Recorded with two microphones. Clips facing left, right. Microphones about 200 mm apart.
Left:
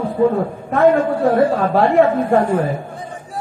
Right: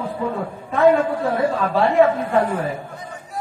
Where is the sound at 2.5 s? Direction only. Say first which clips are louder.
Left 6 dB; 45° left (ahead or behind).